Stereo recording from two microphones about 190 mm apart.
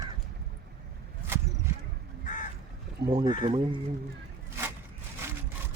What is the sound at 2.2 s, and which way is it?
Crow, 45° left (ahead or behind).